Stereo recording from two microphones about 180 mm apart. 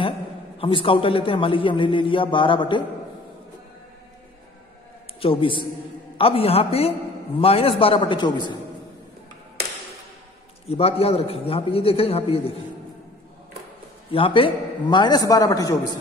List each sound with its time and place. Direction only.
0.6 s a man's voice: 30° left (ahead or behind)
5.2 s a man's voice: 30° left (ahead or behind)
10.7 s a man's voice: 35° left (ahead or behind)
14.1 s a man's voice: 30° left (ahead or behind)